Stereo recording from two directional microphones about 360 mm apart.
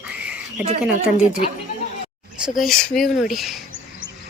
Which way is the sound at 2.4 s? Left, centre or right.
Centre.